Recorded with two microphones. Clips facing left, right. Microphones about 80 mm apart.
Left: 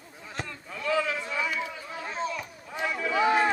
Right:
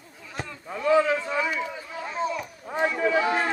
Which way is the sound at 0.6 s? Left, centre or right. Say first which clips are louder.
Right 7 dB; right.